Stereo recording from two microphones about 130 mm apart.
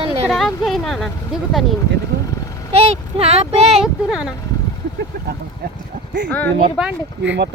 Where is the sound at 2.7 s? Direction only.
50° right (ahead or behind).